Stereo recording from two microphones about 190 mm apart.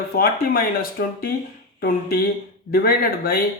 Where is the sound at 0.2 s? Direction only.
50° left (ahead or behind).